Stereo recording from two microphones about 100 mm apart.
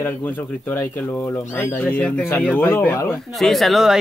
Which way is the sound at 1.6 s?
15° left (ahead or behind).